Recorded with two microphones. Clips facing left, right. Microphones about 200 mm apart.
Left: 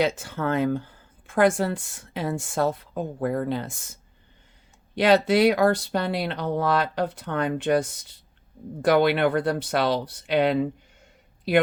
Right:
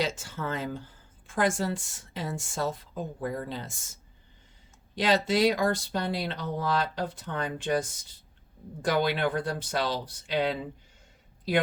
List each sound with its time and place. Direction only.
0.0 s speech: 60° left (ahead or behind)
4.9 s speech: 60° left (ahead or behind)